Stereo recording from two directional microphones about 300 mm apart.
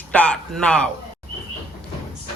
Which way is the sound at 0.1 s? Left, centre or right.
Centre.